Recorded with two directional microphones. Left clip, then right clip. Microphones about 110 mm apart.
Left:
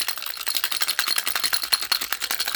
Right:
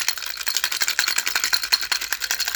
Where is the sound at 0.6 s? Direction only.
15° left (ahead or behind).